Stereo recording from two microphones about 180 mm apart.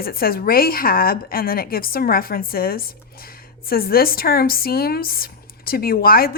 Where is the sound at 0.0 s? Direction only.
55° left (ahead or behind).